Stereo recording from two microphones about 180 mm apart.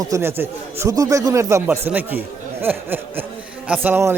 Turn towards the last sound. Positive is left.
turn(degrees=-10)  # may be behind; listen again after turning